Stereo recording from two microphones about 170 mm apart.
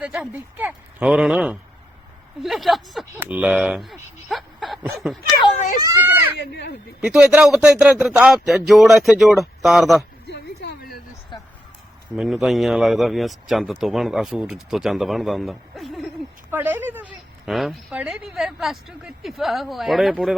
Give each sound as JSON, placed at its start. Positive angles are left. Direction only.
{"t": 0.0, "sound": "speech", "side_deg": -5}
{"t": 5.8, "sound": "a child's voice", "side_deg": -20}
{"t": 6.3, "sound": "speech", "side_deg": 90}
{"t": 7.0, "sound": "speech", "side_deg": -5}
{"t": 10.2, "sound": "a sound", "side_deg": 80}
{"t": 12.1, "sound": "speech", "side_deg": 0}
{"t": 16.5, "sound": "speech", "side_deg": -10}